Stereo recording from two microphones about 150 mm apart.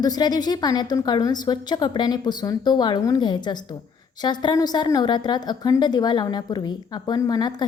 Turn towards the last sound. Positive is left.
turn(degrees=25)  # may be behind; listen again after turning